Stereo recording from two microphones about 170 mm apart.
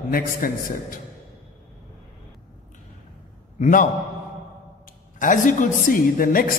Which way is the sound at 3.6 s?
50° left (ahead or behind).